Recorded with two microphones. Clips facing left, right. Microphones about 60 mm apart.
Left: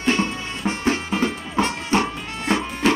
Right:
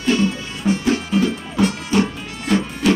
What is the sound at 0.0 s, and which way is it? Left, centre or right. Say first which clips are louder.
Music: right 3 dB; left.